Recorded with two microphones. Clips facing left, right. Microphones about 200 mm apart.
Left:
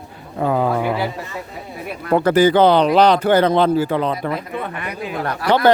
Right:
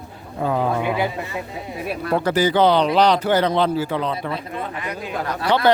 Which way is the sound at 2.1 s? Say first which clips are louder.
Left 5 dB; 55° left (ahead or behind).